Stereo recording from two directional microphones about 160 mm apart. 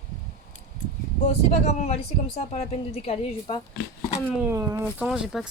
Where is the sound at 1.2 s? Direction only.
40° left (ahead or behind).